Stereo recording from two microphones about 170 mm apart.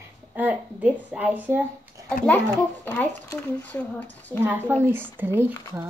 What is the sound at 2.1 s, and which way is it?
Speech, 5° left (ahead or behind).